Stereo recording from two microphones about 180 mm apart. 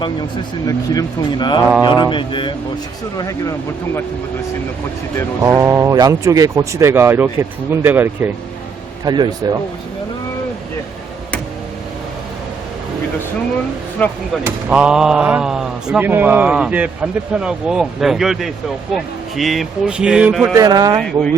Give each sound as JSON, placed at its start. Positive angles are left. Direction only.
{"t": 0.7, "sound": "speech", "side_deg": 20}
{"t": 5.4, "sound": "speech", "side_deg": -15}
{"t": 9.0, "sound": "speech", "side_deg": -25}
{"t": 14.0, "sound": "speech", "side_deg": 10}
{"t": 14.4, "sound": "speech", "side_deg": -5}
{"t": 20.6, "sound": "speech", "side_deg": -20}